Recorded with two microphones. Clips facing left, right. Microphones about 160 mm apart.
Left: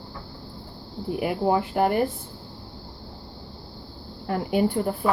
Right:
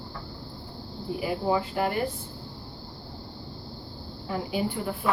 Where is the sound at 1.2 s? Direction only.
55° left (ahead or behind).